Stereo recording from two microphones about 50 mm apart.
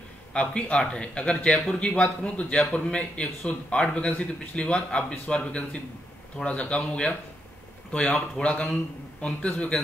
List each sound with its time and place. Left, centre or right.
0.3 s a man's voice: left